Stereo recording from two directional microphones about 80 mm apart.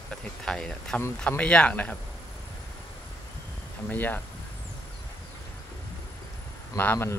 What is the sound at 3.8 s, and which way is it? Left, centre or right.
Speech, left.